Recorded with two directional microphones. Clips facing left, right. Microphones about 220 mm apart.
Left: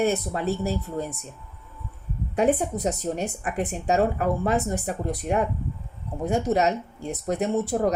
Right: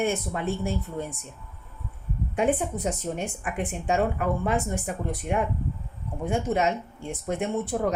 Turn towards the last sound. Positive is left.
turn(degrees=40)  # may be behind; listen again after turning